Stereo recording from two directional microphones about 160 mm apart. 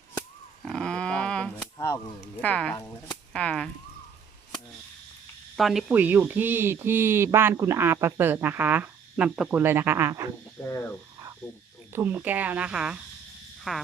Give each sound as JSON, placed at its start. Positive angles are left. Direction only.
{"t": 0.6, "sound": "a sound", "side_deg": 5}
{"t": 2.4, "sound": "speech", "side_deg": 5}
{"t": 5.5, "sound": "speech", "side_deg": 0}
{"t": 5.9, "sound": "speech", "side_deg": -10}
{"t": 10.7, "sound": "speech", "side_deg": 15}
{"t": 11.9, "sound": "speech", "side_deg": -10}